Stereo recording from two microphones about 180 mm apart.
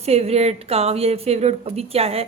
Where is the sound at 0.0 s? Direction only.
35° right (ahead or behind).